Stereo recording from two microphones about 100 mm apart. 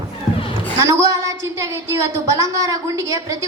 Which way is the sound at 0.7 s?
30° right (ahead or behind).